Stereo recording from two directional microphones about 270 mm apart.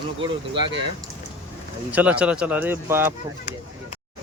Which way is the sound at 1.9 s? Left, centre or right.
Centre.